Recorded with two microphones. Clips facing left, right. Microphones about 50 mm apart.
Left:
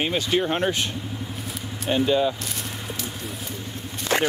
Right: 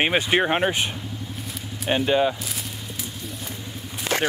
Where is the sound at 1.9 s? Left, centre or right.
Right.